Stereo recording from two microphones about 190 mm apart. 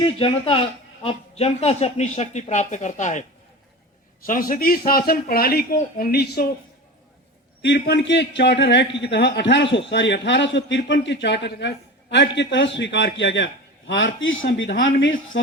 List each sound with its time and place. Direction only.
0.0 s a man's voice: 30° left (ahead or behind)
4.3 s speech: 50° left (ahead or behind)
7.6 s a man's voice: 65° left (ahead or behind)